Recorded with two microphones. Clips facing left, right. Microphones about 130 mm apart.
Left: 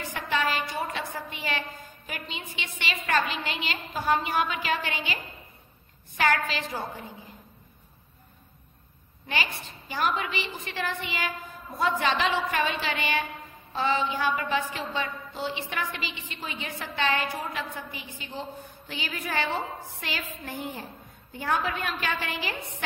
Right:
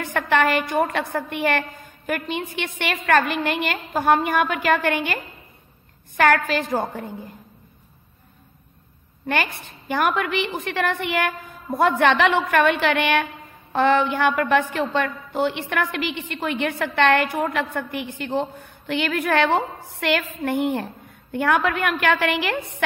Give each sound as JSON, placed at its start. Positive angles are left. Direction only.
{"t": 0.0, "sound": "a woman's voice", "side_deg": -65}
{"t": 9.3, "sound": "a woman's voice", "side_deg": -55}